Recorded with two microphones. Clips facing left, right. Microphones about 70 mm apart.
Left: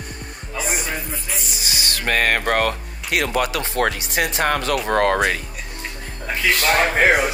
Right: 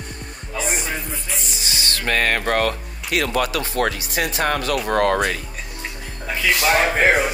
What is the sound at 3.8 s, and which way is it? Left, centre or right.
Speech, left.